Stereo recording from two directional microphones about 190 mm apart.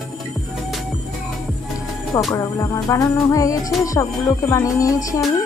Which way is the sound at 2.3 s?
15° left (ahead or behind).